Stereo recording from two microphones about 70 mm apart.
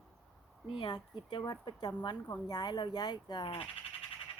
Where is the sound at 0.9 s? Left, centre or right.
Left.